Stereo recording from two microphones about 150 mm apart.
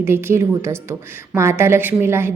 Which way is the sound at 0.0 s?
15° right (ahead or behind).